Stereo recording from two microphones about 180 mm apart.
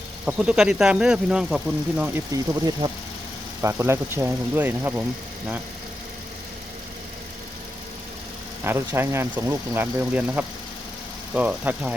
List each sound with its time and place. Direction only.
0.3 s speech: 5° right (ahead or behind)
2.3 s speech: 20° right (ahead or behind)
8.6 s speech: 10° right (ahead or behind)